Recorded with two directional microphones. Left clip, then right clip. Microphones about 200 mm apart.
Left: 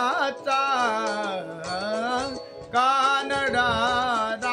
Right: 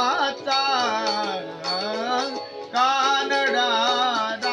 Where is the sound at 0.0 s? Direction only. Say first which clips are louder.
Right 2 dB; 25° left (ahead or behind).